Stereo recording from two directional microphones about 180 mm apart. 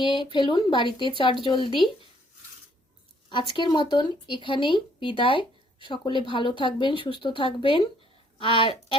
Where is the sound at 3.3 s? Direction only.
25° left (ahead or behind).